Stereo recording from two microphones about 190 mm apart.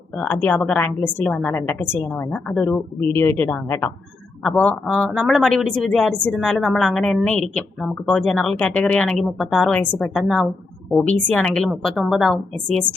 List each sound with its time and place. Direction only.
0.2 s a woman's voice: 5° left (ahead or behind)